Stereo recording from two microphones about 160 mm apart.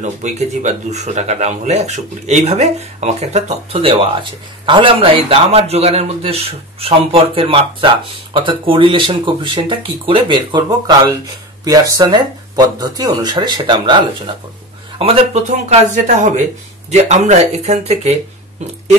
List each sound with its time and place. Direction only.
0.0 s a man's voice: 50° right (ahead or behind)